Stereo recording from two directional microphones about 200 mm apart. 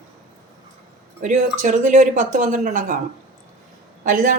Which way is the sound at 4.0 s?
45° right (ahead or behind).